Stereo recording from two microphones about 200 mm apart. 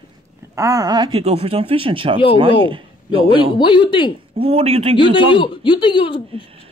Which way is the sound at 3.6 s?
25° left (ahead or behind).